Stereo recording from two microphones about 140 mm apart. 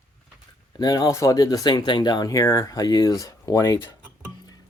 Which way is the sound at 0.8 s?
25° left (ahead or behind).